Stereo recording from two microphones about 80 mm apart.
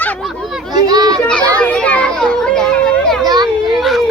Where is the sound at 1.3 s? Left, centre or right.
Centre.